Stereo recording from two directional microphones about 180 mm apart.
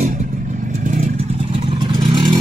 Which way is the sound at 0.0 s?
45° right (ahead or behind).